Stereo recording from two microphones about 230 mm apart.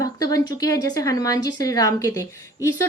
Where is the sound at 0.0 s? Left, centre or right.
Centre.